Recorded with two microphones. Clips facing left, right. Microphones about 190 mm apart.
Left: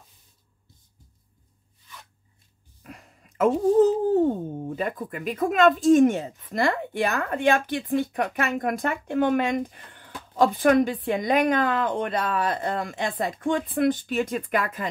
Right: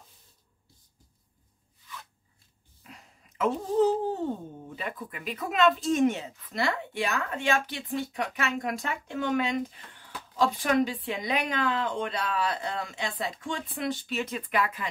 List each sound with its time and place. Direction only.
2.8 s speech: 50° left (ahead or behind)